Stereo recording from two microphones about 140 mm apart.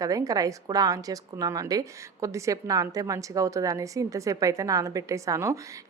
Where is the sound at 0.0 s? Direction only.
25° right (ahead or behind).